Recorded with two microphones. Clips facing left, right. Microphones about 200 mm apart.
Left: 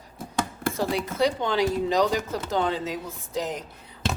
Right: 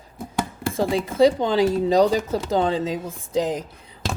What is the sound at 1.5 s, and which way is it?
Speech, 35° right (ahead or behind).